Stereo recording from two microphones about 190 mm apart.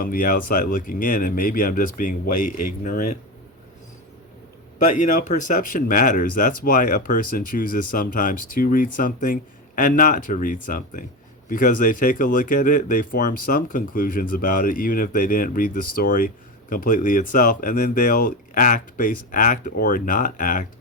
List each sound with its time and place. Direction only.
0.0 s speech: 50° left (ahead or behind)
4.9 s speech: 40° left (ahead or behind)